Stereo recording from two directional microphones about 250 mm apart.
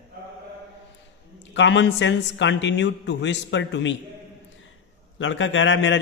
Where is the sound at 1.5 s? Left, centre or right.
Left.